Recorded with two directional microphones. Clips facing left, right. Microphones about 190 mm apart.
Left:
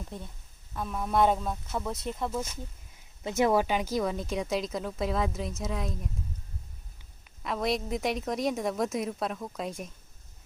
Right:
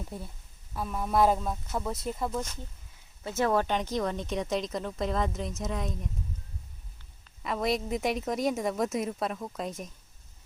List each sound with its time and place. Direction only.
0.1 s speech: 5° right (ahead or behind)
3.2 s speech: 15° left (ahead or behind)
7.4 s speech: centre (ahead or behind)